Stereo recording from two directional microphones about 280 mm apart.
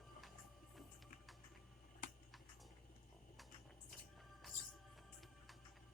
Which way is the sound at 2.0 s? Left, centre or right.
Left.